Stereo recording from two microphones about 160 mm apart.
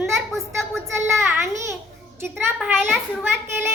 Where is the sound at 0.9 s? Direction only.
15° right (ahead or behind).